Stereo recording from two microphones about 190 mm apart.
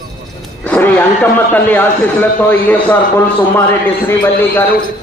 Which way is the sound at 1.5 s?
10° left (ahead or behind).